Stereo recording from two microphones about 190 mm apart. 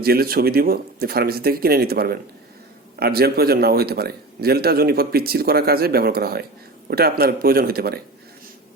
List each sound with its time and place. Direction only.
0.0 s a man's voice: 55° right (ahead or behind)